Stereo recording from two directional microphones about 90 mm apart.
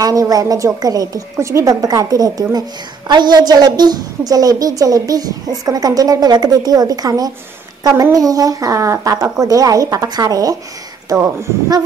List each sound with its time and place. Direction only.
0.0 s a woman's voice: 40° right (ahead or behind)
11.1 s speech: 30° right (ahead or behind)